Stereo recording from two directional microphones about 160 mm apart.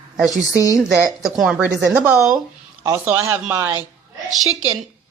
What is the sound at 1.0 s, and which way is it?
Speech, centre (ahead or behind).